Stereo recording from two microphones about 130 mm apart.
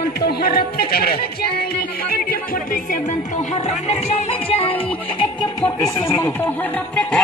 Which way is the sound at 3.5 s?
60° left (ahead or behind).